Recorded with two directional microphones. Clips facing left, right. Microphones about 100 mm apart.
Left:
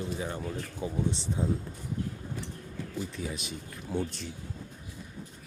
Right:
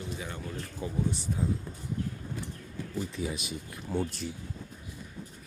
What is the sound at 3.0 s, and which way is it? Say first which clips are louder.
Speech: right 3 dB; centre (ahead or behind).